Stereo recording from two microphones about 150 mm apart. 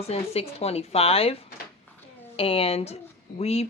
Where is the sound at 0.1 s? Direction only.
40° left (ahead or behind).